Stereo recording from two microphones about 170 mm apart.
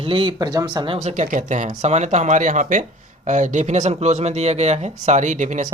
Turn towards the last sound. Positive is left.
turn(degrees=-45)  # may be behind; listen again after turning